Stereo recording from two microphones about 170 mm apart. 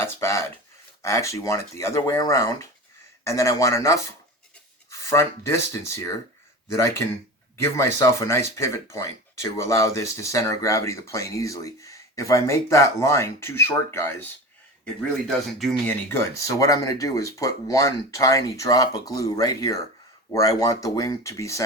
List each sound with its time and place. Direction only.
0.0 s a sound: 15° left (ahead or behind)
1.0 s speech: 15° left (ahead or behind)
15.5 s speech: centre (ahead or behind)
16.0 s speech: 15° left (ahead or behind)